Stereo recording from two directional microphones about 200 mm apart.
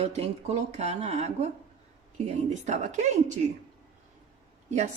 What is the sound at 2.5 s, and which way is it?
Speech, 35° right (ahead or behind).